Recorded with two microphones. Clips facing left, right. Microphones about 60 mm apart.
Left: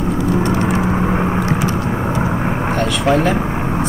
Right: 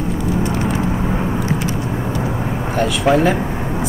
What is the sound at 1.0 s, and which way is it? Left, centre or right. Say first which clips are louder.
Vehicle: left 3 dB; left.